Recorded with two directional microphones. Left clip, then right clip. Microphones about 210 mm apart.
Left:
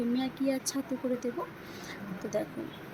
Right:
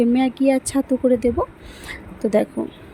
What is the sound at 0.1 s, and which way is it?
Speech, 35° right (ahead or behind).